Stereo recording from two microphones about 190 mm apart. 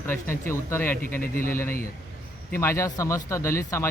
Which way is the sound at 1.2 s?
50° left (ahead or behind).